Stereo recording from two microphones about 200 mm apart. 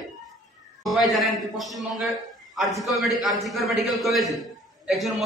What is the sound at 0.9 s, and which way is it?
A man's voice, centre (ahead or behind).